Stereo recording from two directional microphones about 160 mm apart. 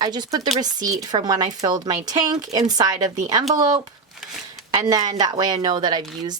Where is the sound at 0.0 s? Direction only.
25° right (ahead or behind).